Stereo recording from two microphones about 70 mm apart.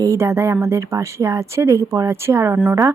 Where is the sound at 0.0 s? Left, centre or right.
Right.